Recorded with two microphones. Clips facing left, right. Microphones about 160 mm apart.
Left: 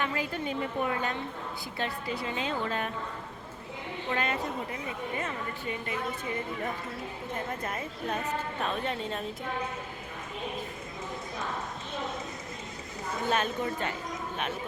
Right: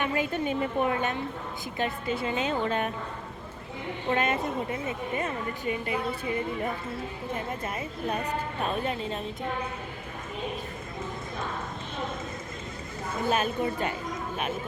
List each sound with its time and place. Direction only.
0.0 s a woman's voice: 20° right (ahead or behind)
4.1 s speech: 25° right (ahead or behind)
8.8 s a woman's voice: 5° right (ahead or behind)
13.3 s a woman's voice: 10° right (ahead or behind)